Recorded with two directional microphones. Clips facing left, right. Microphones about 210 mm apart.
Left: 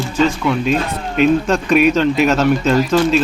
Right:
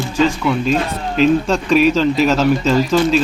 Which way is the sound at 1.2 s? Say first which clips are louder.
Even; 5° left (ahead or behind).